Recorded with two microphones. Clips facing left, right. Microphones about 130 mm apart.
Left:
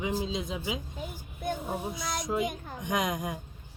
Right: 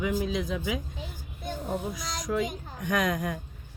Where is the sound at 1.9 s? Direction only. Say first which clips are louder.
Right 1 dB; 25° left (ahead or behind).